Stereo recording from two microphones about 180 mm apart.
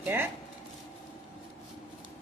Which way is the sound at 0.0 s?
10° right (ahead or behind).